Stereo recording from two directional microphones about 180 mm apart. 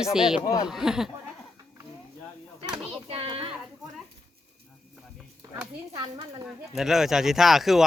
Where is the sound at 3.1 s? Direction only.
30° right (ahead or behind).